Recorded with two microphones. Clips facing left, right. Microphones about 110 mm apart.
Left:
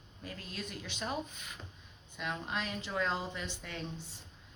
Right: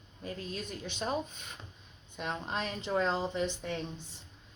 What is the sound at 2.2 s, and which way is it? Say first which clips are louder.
Speech: right 2 dB; 30° right (ahead or behind).